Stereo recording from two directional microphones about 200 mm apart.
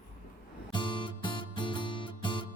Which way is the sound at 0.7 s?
25° left (ahead or behind).